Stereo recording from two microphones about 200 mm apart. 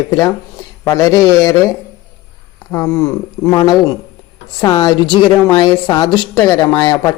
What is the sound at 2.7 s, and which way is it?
A woman's voice, 15° left (ahead or behind).